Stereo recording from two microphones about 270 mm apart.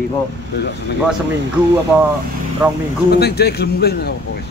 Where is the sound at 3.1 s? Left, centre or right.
Left.